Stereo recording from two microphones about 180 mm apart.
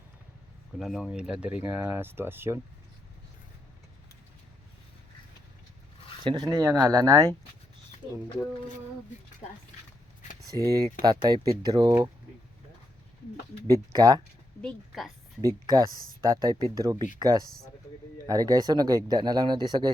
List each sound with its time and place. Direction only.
0.8 s speech: centre (ahead or behind)
6.2 s speech: 20° right (ahead or behind)
10.5 s speech: 20° right (ahead or behind)
13.7 s speech: 20° right (ahead or behind)
14.6 s a woman's voice: centre (ahead or behind)
15.4 s speech: 20° right (ahead or behind)